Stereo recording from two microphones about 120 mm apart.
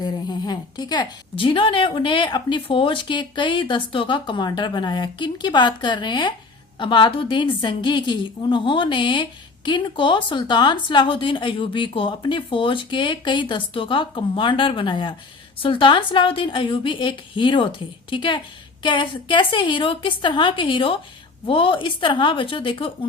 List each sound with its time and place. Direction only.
0.0 s a woman's voice: 35° left (ahead or behind)